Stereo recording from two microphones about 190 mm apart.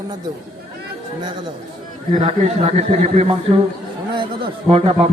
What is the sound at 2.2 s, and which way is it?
A man's voice, 35° right (ahead or behind).